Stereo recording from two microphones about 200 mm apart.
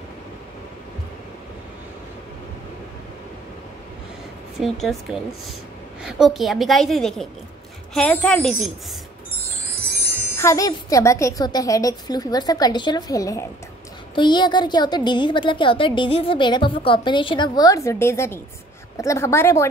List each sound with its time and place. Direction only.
4.6 s a woman's voice: centre (ahead or behind)
10.3 s a woman's voice: 15° left (ahead or behind)